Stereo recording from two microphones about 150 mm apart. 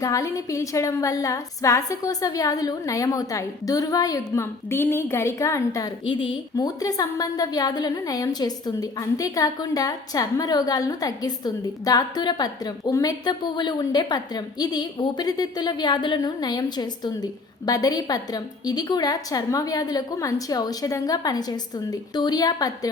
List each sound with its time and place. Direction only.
0.0 s a woman's voice: 20° left (ahead or behind)
6.1 s a woman's voice: 35° left (ahead or behind)